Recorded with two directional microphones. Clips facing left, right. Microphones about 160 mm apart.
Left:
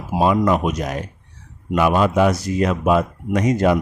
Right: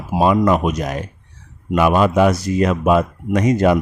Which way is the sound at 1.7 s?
70° right (ahead or behind).